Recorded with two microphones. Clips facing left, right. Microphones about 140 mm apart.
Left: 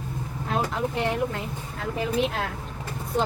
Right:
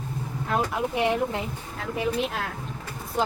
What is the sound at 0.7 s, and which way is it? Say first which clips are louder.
Speech: right 2 dB; 10° right (ahead or behind).